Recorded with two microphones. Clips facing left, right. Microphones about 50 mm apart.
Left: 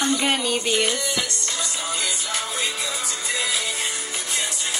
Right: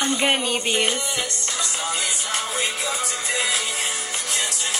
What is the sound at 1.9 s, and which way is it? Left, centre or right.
Music, right.